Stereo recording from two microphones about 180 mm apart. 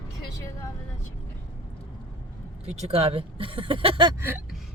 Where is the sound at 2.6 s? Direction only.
35° right (ahead or behind).